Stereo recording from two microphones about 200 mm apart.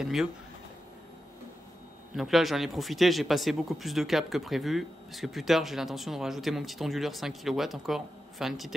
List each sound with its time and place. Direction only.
0.0 s speech: centre (ahead or behind)
2.1 s speech: centre (ahead or behind)